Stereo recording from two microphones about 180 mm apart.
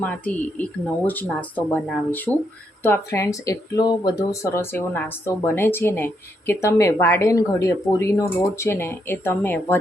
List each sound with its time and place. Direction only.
0.0 s speech: 10° left (ahead or behind)